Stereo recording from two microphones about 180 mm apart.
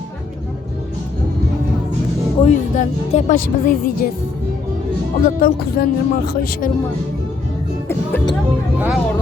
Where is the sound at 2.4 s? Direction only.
40° left (ahead or behind).